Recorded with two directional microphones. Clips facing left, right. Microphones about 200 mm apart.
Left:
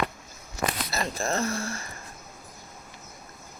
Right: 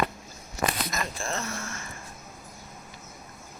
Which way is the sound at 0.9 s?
35° left (ahead or behind).